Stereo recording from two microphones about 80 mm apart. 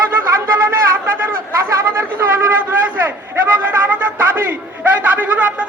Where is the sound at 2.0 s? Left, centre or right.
Right.